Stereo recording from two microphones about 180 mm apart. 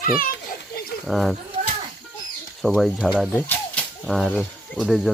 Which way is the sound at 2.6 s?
5° left (ahead or behind).